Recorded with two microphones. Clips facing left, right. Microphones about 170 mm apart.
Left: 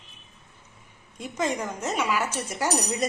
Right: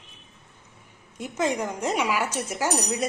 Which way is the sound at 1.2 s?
10° right (ahead or behind).